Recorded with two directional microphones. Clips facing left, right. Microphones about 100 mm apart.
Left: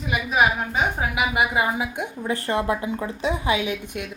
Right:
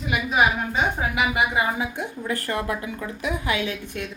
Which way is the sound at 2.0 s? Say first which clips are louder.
Left 1 dB; 20° left (ahead or behind).